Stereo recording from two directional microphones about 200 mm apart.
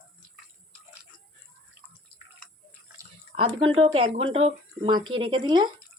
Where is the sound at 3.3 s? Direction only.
25° right (ahead or behind).